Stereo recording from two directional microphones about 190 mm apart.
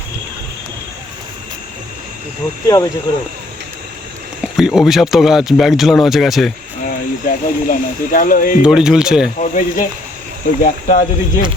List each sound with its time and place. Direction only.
2.6 s speech: 20° left (ahead or behind)
4.5 s speech: centre (ahead or behind)
7.3 s speech: 45° left (ahead or behind)
8.6 s speech: 5° right (ahead or behind)
9.4 s speech: 45° left (ahead or behind)